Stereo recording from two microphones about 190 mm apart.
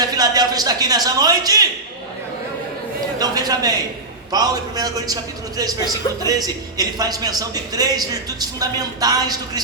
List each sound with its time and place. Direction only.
0.0 s a man's voice: 20° right (ahead or behind)
3.2 s a man's voice: 20° right (ahead or behind)
6.2 s a man's voice: 20° right (ahead or behind)